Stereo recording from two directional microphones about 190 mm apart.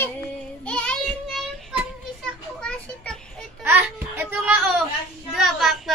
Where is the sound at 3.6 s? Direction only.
10° right (ahead or behind).